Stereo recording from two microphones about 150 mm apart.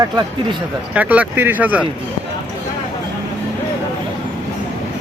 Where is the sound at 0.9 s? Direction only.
10° right (ahead or behind).